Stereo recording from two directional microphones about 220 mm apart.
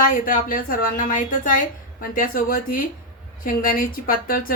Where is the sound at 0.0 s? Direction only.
40° left (ahead or behind).